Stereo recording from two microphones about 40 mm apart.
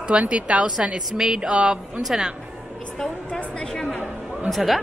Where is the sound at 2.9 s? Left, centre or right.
Centre.